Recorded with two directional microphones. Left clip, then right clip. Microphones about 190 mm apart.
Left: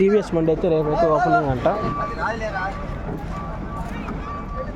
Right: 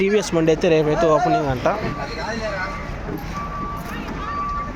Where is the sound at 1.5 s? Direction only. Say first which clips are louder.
Even; 15° left (ahead or behind).